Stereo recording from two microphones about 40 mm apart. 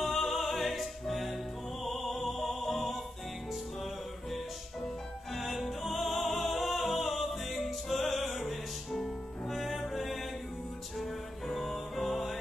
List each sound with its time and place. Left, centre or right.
0.0 s music: centre
5.3 s music: centre
11.5 s music: centre